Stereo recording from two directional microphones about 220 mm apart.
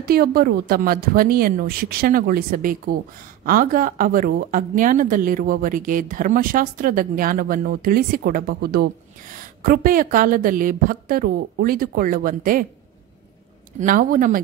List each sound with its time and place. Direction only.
0.0 s speech: 45° right (ahead or behind)
13.7 s speech: 40° right (ahead or behind)